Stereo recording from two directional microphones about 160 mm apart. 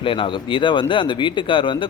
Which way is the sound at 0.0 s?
35° left (ahead or behind).